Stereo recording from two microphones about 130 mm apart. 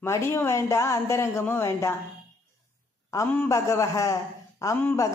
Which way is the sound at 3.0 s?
20° left (ahead or behind).